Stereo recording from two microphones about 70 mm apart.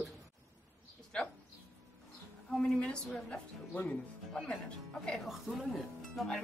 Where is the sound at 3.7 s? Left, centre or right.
Left.